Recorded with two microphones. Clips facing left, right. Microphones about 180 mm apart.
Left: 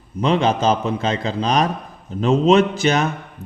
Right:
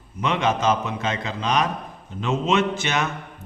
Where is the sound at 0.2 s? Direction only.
35° left (ahead or behind).